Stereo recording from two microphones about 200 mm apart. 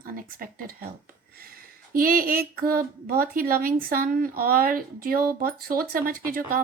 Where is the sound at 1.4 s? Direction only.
45° right (ahead or behind).